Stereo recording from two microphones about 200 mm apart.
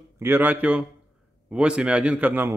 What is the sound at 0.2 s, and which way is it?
A man's voice, 10° right (ahead or behind).